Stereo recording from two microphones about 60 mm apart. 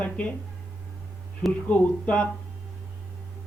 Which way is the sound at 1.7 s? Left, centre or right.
Left.